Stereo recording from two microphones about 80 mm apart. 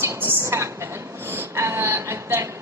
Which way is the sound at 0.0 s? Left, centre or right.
Right.